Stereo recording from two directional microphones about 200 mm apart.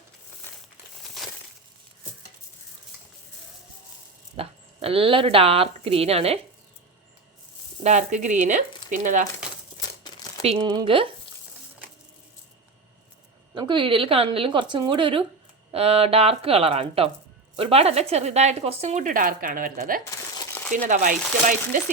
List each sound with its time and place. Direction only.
4.4 s a woman's voice: 30° right (ahead or behind)
7.9 s a woman's voice: 35° right (ahead or behind)
10.0 s crumpling: 20° left (ahead or behind)
10.4 s speech: 25° right (ahead or behind)
13.5 s a woman's voice: 25° right (ahead or behind); by 21.8 s 45° right (ahead or behind)